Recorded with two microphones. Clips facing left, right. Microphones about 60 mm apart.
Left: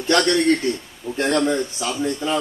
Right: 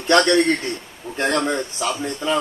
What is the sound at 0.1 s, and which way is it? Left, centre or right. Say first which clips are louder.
A man's voice: right 1 dB; right.